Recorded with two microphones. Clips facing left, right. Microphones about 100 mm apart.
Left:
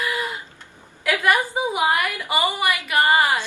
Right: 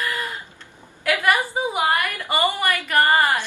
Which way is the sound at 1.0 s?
Centre (ahead or behind).